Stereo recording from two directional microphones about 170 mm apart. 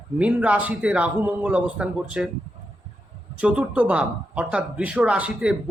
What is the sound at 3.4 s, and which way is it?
Speech, 5° right (ahead or behind).